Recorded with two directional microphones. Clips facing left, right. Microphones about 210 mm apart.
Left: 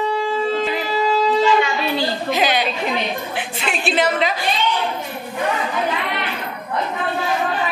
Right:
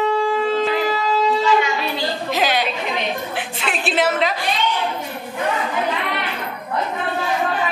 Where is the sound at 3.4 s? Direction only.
Centre (ahead or behind).